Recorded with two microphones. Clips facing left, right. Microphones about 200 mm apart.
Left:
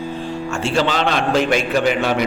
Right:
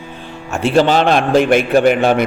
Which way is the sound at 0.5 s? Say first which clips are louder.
Right 7 dB; 55° right (ahead or behind).